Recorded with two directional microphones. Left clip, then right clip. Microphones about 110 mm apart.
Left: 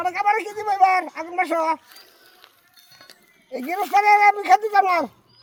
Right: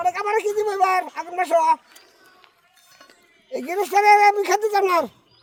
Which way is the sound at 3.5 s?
50° right (ahead or behind).